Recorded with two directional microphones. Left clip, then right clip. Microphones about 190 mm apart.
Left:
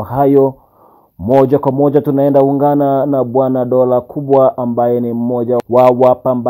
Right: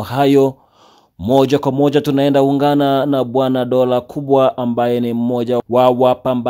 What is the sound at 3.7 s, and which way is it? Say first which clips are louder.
Speech: left 3 dB; 25° right (ahead or behind).